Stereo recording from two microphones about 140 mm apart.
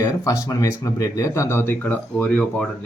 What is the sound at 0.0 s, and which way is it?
Speech, 25° left (ahead or behind).